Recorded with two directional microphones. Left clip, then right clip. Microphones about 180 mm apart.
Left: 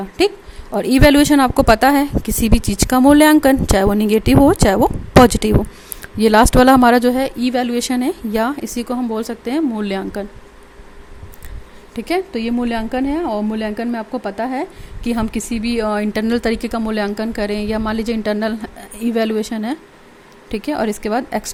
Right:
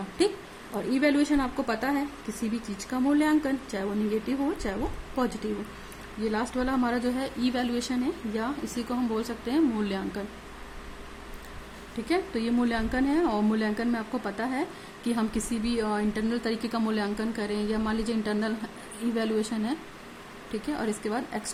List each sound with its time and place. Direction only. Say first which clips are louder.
0.8 s a woman's voice: left 13 dB; 60° left (ahead or behind); by 10.2 s 45° left (ahead or behind)
11.9 s speech: left 9 dB; 45° left (ahead or behind)